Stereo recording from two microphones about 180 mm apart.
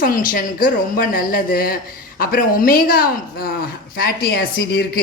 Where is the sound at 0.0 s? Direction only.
50° left (ahead or behind).